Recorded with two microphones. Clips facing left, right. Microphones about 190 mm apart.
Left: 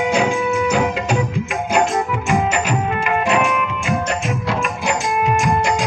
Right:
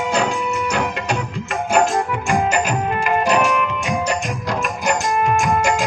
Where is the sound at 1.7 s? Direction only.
5° left (ahead or behind).